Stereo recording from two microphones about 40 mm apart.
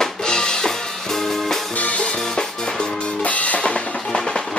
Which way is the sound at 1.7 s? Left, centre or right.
Left.